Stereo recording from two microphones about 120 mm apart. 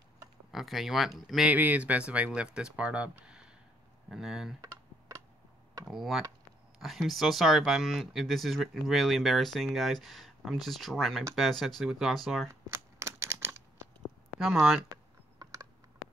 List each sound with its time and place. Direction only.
0.5 s speech: centre (ahead or behind)
1.5 s speech: 15° right (ahead or behind)
4.6 s computer keyboard: 25° right (ahead or behind)
5.9 s speech: centre (ahead or behind)
12.6 s a sound: 25° right (ahead or behind)
14.4 s speech: centre (ahead or behind)
15.3 s a sound: 30° right (ahead or behind)